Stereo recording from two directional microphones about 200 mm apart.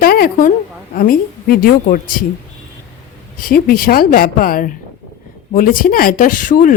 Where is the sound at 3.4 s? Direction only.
45° left (ahead or behind).